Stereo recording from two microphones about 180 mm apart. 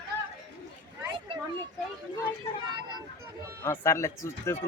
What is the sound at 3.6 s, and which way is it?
Speech, 15° left (ahead or behind).